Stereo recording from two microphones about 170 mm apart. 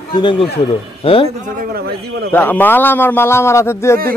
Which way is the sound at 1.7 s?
70° right (ahead or behind).